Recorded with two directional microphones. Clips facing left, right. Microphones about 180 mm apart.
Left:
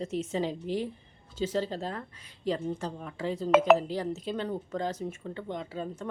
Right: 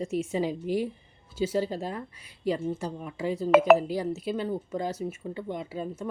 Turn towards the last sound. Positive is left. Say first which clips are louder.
# right 2 dB
turn(degrees=-10)  # may be behind; listen again after turning